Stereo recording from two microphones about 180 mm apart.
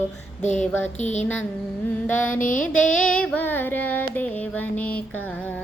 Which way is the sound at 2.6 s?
5° left (ahead or behind).